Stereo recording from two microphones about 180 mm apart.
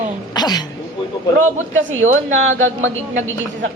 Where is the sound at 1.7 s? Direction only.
90° right.